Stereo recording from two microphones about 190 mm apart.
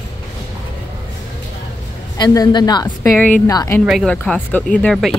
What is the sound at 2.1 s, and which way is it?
A woman's voice, 20° left (ahead or behind).